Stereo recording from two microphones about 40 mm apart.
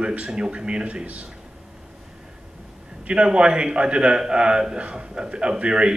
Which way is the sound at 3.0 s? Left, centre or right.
Right.